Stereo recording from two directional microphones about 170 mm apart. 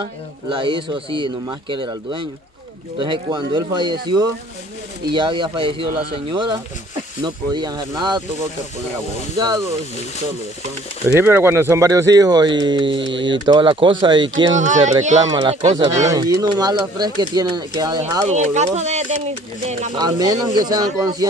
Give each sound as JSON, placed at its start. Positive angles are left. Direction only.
{"t": 0.5, "sound": "speech", "side_deg": -30}
{"t": 5.1, "sound": "speech", "side_deg": -30}
{"t": 11.1, "sound": "speech", "side_deg": -10}
{"t": 14.6, "sound": "speech", "side_deg": -45}
{"t": 15.2, "sound": "speech", "side_deg": -25}
{"t": 15.6, "sound": "speech", "side_deg": -40}
{"t": 16.1, "sound": "speech", "side_deg": -20}
{"t": 18.2, "sound": "speech", "side_deg": -40}
{"t": 18.8, "sound": "a sound", "side_deg": -40}
{"t": 20.0, "sound": "speech", "side_deg": -20}